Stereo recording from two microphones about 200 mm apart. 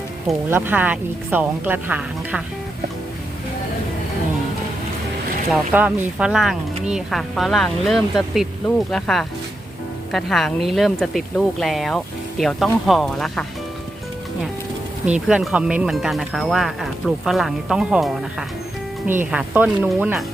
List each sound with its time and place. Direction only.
0.3 s speech: 10° right (ahead or behind)
5.5 s speech: 10° right (ahead or behind)
15.0 s speech: 5° right (ahead or behind)